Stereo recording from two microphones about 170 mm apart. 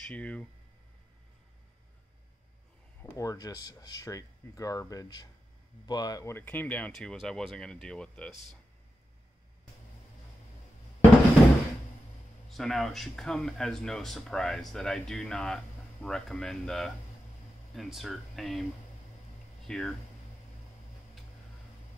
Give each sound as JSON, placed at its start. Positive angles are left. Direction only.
{"t": 0.0, "sound": "speech", "side_deg": 5}
{"t": 3.0, "sound": "speech", "side_deg": 20}
{"t": 12.4, "sound": "speech", "side_deg": 0}
{"t": 19.7, "sound": "speech", "side_deg": 5}